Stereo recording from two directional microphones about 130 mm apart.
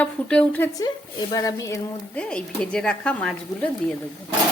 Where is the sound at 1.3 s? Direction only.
25° left (ahead or behind).